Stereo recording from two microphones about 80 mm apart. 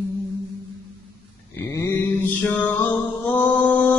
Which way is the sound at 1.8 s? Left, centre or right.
Left.